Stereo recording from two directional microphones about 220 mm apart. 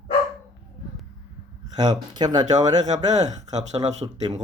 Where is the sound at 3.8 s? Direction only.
20° right (ahead or behind).